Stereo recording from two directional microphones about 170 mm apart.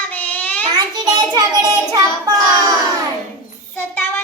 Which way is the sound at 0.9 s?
25° right (ahead or behind).